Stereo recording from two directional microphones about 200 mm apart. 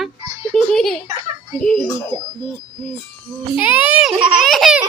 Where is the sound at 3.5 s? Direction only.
10° right (ahead or behind).